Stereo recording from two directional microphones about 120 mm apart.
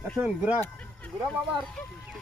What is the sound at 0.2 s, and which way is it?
Speech, 10° right (ahead or behind).